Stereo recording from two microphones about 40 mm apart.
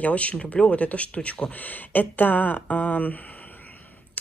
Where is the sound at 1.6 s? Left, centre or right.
Left.